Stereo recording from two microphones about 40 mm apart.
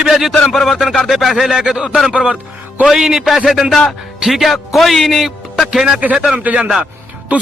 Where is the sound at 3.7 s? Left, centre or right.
Centre.